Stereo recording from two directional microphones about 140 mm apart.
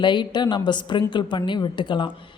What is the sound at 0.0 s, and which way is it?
Speech, 35° left (ahead or behind).